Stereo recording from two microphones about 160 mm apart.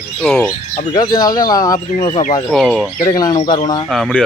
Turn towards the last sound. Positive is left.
turn(degrees=0)  # may be behind; listen again after turning